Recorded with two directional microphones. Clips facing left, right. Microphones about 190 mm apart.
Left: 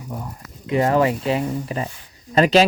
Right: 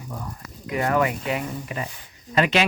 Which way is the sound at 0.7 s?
25° left (ahead or behind).